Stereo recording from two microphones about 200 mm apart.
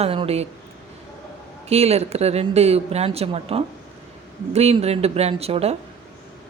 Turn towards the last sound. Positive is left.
turn(degrees=-30)  # may be behind; listen again after turning